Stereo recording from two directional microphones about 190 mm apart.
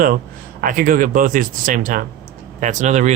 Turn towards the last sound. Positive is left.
turn(degrees=-40)  # may be behind; listen again after turning